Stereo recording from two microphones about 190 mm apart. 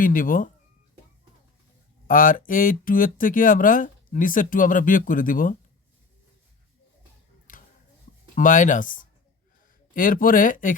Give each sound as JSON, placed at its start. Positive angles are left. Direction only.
{"t": 0.0, "sound": "speech", "side_deg": 45}
{"t": 2.0, "sound": "speech", "side_deg": 45}
{"t": 7.5, "sound": "a sound", "side_deg": 45}
{"t": 8.4, "sound": "speech", "side_deg": 45}